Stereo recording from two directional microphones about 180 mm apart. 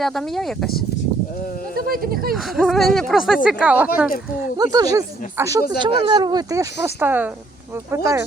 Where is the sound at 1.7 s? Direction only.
55° right (ahead or behind).